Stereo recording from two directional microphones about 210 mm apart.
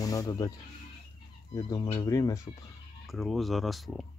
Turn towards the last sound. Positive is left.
turn(degrees=0)  # may be behind; listen again after turning